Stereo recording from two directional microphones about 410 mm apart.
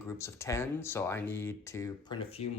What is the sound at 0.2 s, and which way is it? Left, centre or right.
Speech, centre.